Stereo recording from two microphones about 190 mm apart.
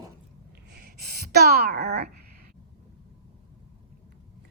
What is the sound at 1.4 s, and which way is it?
Speech, 55° right (ahead or behind).